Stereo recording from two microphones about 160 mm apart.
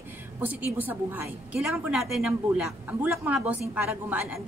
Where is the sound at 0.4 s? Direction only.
10° right (ahead or behind).